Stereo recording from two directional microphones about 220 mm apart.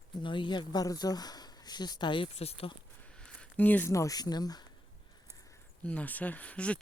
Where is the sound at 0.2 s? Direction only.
20° left (ahead or behind).